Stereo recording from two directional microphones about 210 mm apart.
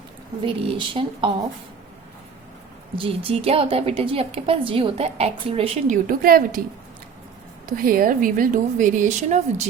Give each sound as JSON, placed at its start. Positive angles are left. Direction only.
{"t": 0.4, "sound": "a woman's voice", "side_deg": -25}
{"t": 2.9, "sound": "a woman's voice", "side_deg": -25}
{"t": 7.8, "sound": "speech", "side_deg": -45}